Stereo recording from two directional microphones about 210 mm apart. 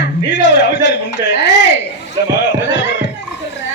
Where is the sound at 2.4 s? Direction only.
60° left (ahead or behind).